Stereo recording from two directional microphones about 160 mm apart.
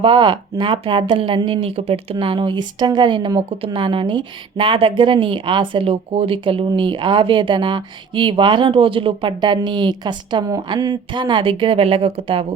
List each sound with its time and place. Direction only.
0.0 s speech: 30° right (ahead or behind)